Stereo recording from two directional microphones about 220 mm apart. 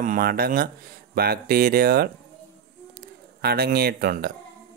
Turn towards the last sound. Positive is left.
turn(degrees=-45)  # may be behind; listen again after turning